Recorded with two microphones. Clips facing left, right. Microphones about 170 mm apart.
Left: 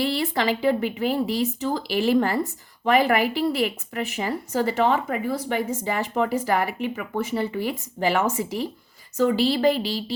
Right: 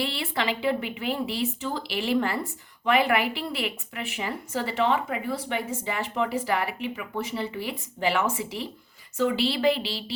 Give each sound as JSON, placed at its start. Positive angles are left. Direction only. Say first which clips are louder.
{"t": 0.0, "sound": "speech", "louder": "left 5 dB", "side_deg": 40}